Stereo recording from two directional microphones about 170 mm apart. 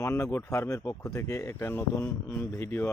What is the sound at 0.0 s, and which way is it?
Speech, 15° left (ahead or behind).